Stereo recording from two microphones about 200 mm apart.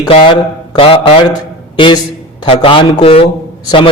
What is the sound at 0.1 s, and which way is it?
A man's voice, 25° left (ahead or behind).